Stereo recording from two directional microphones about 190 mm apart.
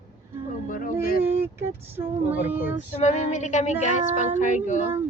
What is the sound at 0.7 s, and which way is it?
Speech, 45° left (ahead or behind).